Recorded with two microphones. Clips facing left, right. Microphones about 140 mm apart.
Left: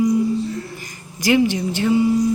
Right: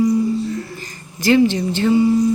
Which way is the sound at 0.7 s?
15° left (ahead or behind).